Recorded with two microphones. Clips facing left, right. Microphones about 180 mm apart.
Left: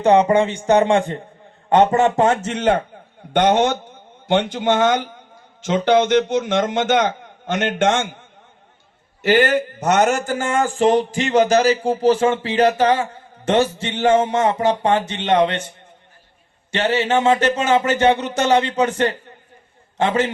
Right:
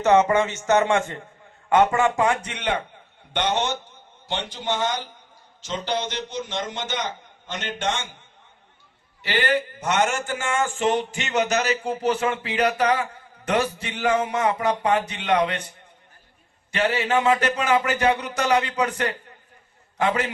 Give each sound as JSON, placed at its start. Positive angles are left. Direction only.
{"t": 0.0, "sound": "a man's voice", "side_deg": 15}
{"t": 1.9, "sound": "a man's voice", "side_deg": 40}
{"t": 16.7, "sound": "speech", "side_deg": 30}